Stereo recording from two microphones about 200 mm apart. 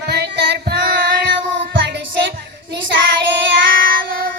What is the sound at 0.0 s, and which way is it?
Child singing, 55° right (ahead or behind).